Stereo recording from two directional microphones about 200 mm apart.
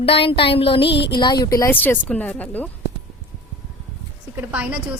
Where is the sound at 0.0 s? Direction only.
25° left (ahead or behind).